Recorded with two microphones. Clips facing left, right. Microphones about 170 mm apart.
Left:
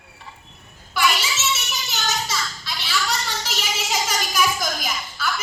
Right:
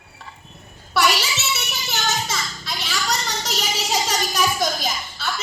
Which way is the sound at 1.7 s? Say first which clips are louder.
Right 2 dB; 50° right (ahead or behind).